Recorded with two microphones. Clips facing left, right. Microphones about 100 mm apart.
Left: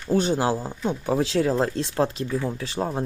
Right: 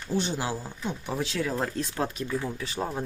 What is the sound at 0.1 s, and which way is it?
Speech, 40° left (ahead or behind).